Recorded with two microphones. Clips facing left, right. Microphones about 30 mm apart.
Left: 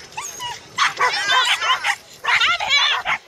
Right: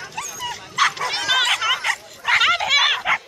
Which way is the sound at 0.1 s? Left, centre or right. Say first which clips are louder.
Left 2 dB; centre.